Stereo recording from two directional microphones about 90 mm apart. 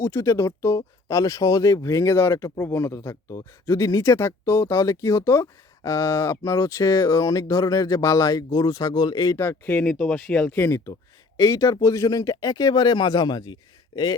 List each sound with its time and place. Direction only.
0.0 s speech: 30° left (ahead or behind); by 9.4 s 50° left (ahead or behind)
9.4 s speech: 25° left (ahead or behind)
9.8 s speech: 10° left (ahead or behind)
10.6 s speech: 30° left (ahead or behind); by 14.2 s 50° left (ahead or behind)